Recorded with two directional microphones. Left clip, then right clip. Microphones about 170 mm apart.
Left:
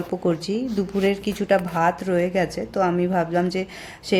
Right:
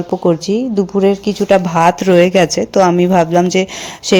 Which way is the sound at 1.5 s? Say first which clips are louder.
Right 9 dB; 45° right (ahead or behind).